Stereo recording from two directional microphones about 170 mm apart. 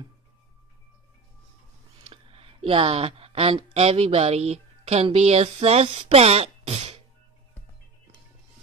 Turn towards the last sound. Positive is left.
turn(degrees=-40)  # may be behind; listen again after turning